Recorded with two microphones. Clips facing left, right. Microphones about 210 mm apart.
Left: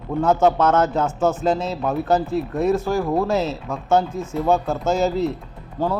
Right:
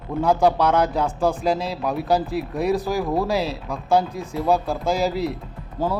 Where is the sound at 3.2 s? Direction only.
10° right (ahead or behind).